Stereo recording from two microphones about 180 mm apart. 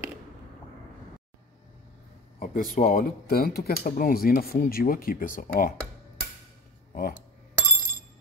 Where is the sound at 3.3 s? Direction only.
60° left (ahead or behind).